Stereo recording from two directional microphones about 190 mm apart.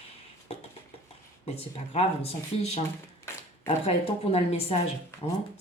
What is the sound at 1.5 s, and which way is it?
Speech, 35° left (ahead or behind).